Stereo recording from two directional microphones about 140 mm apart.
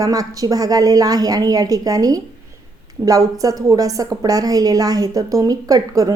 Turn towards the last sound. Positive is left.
turn(degrees=-25)  # may be behind; listen again after turning